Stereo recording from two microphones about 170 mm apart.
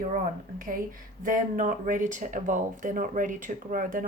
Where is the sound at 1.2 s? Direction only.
50° right (ahead or behind).